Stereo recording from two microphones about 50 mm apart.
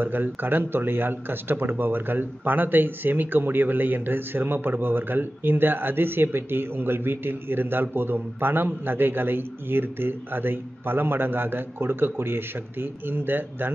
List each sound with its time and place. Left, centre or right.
0.0 s speech: right